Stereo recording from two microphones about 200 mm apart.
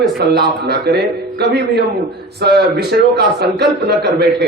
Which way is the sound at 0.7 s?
55° right (ahead or behind).